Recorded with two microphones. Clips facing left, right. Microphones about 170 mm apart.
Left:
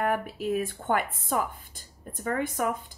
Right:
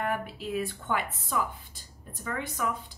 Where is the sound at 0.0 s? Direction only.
50° left (ahead or behind).